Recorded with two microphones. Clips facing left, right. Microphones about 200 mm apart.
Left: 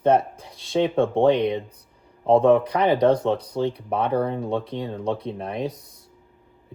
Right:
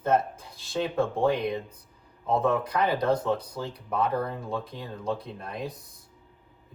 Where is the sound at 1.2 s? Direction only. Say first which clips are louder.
Left 8 dB; 80° left.